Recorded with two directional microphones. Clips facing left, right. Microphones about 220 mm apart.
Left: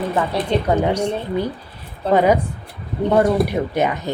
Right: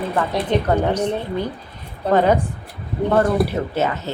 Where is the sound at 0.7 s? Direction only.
10° left (ahead or behind).